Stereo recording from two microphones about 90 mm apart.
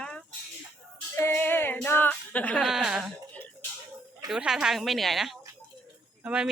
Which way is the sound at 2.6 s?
5° right (ahead or behind).